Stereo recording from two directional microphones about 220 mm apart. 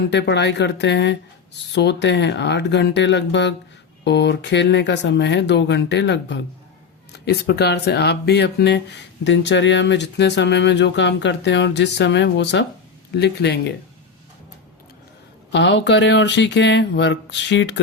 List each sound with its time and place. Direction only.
0.1 s speech: 50° left (ahead or behind)
15.5 s speech: 55° left (ahead or behind)